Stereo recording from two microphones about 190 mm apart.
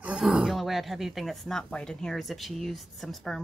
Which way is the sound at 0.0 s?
5° right (ahead or behind).